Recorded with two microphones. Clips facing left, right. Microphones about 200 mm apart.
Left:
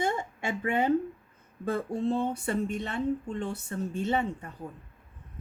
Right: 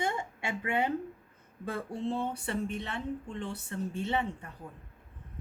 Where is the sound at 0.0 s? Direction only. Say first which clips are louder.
Left 4 dB; 45° left (ahead or behind).